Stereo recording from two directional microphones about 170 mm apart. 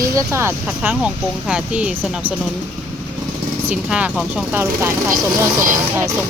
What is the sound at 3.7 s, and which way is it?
Speech, 5° right (ahead or behind).